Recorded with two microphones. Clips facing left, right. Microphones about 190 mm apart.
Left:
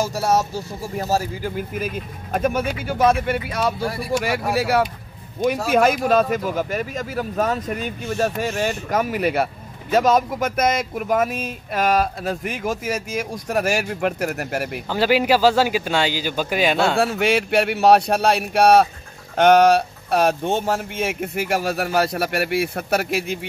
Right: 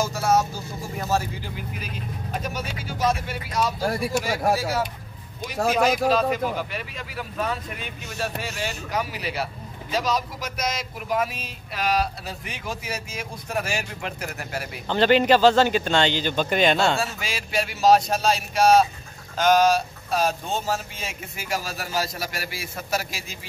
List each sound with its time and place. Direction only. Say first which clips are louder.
0.0 s speech: left 2 dB; 35° left (ahead or behind); by 4.8 s 65° left (ahead or behind)
5.7 s speech: left 2 dB; 55° left (ahead or behind)
14.9 s speech: even; 5° left (ahead or behind)
16.9 s speech: left 9 dB; 60° left (ahead or behind)